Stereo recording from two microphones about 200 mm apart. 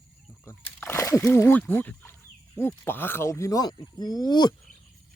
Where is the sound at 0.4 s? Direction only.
10° left (ahead or behind).